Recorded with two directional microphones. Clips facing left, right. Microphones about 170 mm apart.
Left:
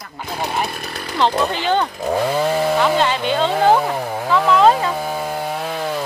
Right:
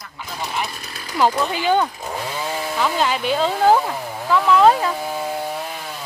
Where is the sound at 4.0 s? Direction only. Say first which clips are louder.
Left 6 dB; 65° left (ahead or behind).